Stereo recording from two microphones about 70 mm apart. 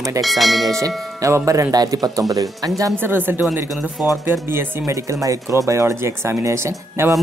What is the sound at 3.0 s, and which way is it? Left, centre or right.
Speech, right.